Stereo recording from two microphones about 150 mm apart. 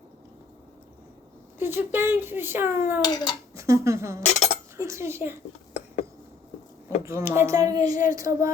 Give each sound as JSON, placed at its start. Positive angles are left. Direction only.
{"t": 1.5, "sound": "speech", "side_deg": -15}
{"t": 3.0, "sound": "babbling", "side_deg": 30}
{"t": 3.5, "sound": "speech", "side_deg": -20}
{"t": 4.3, "sound": "speech", "side_deg": 50}
{"t": 4.8, "sound": "speech", "side_deg": -20}
{"t": 7.0, "sound": "speech", "side_deg": -20}